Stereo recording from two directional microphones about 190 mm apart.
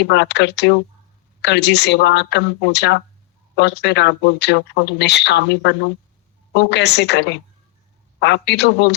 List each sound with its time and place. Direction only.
0.0 s speech: 65° left (ahead or behind)